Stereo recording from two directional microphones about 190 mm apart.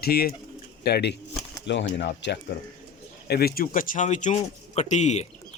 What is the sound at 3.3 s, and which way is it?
Speech, 55° left (ahead or behind).